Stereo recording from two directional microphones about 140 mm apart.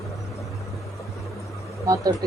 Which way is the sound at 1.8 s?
25° right (ahead or behind).